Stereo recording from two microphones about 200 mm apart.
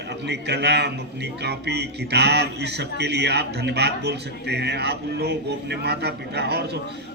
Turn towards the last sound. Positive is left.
turn(degrees=-55)  # may be behind; listen again after turning